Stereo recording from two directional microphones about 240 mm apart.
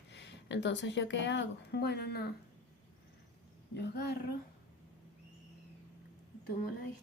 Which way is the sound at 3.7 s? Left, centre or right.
Left.